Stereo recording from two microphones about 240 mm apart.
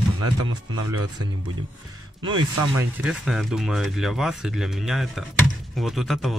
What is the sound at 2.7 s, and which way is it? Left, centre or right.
Speech, centre.